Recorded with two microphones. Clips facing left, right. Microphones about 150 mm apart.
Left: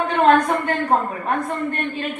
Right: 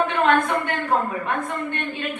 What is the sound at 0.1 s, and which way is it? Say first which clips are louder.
A man's voice: left 4 dB; 40° left (ahead or behind).